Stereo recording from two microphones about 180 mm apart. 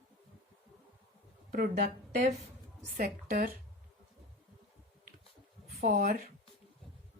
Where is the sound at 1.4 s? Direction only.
55° right (ahead or behind).